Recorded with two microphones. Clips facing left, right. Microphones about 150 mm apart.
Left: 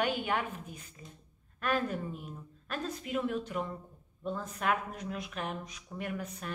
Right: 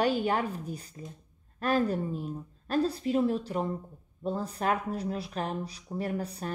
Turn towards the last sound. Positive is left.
turn(degrees=-35)  # may be behind; listen again after turning